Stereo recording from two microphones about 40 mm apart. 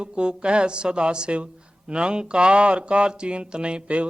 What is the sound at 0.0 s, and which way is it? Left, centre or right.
Speech, right.